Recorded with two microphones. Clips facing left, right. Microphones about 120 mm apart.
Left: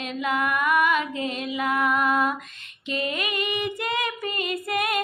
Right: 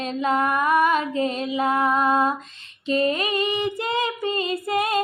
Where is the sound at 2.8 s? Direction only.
35° right (ahead or behind).